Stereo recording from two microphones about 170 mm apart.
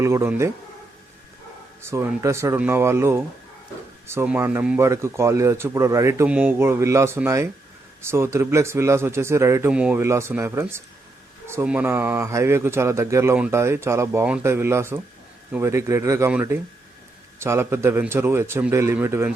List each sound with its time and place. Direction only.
0.0 s speech: 15° right (ahead or behind)
1.8 s speech: 15° right (ahead or behind)